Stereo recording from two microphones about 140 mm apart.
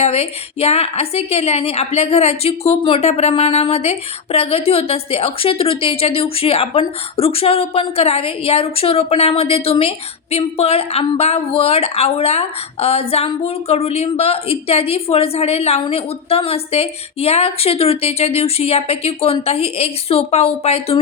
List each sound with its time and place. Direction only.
0.0 s a woman's voice: 45° left (ahead or behind)